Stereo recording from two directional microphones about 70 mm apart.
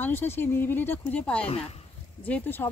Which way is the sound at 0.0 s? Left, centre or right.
Left.